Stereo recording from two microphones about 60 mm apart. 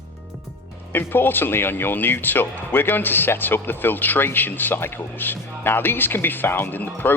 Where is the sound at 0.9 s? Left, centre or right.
Left.